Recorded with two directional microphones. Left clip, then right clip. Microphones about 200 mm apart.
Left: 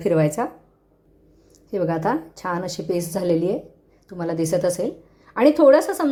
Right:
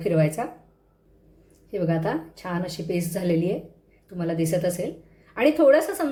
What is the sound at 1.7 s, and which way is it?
A woman's voice, 30° left (ahead or behind).